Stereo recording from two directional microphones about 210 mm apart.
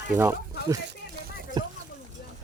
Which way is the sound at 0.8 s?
50° right (ahead or behind).